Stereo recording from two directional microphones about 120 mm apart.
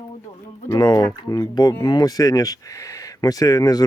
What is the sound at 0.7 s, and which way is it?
Speech, 35° left (ahead or behind).